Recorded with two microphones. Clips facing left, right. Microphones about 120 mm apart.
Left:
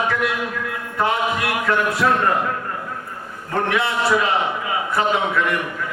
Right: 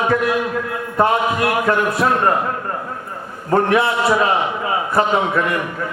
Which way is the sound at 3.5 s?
30° right (ahead or behind).